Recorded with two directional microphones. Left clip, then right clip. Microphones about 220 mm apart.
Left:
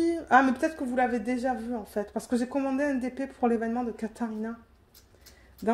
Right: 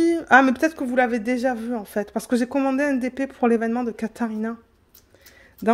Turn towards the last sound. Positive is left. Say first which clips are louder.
# right 7 dB
turn(degrees=-45)  # may be behind; listen again after turning